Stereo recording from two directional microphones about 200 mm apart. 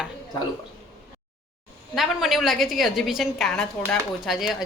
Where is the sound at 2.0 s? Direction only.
Centre (ahead or behind).